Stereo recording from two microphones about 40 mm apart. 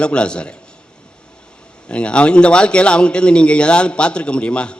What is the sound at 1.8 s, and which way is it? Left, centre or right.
A man's voice, left.